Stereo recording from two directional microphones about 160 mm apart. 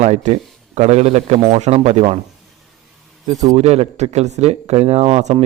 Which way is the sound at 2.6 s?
Centre (ahead or behind).